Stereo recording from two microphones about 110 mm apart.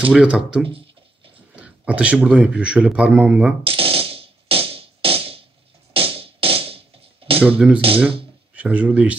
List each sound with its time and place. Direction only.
0.1 s speech: 10° right (ahead or behind)
0.7 s a sound: 55° right (ahead or behind)
1.5 s a man's voice: 10° right (ahead or behind)
3.6 s music: 55° right (ahead or behind)
7.4 s speech: 10° right (ahead or behind)